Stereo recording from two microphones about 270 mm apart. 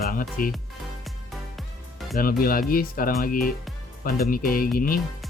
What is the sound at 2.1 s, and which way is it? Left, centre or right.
Speech, left.